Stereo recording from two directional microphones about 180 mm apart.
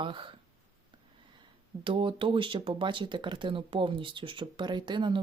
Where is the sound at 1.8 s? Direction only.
30° right (ahead or behind).